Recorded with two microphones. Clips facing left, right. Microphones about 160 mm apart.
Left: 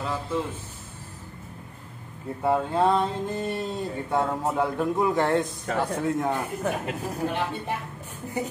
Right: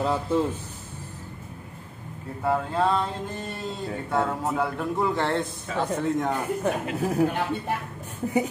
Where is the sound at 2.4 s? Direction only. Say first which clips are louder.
Left 2 dB; 20° left (ahead or behind).